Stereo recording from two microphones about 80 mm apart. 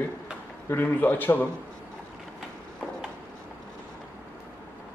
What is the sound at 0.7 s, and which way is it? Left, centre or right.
Speech, left.